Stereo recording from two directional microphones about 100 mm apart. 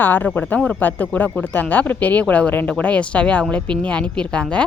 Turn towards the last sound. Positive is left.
turn(degrees=10)  # may be behind; listen again after turning